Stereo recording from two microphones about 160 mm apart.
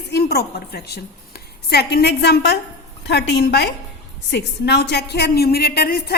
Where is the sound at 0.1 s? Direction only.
85° left.